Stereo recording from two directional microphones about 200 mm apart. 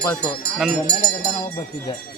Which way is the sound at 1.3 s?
15° left (ahead or behind).